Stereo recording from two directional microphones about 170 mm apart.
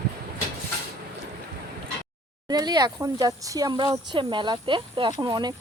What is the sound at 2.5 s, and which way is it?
Speech, 25° right (ahead or behind).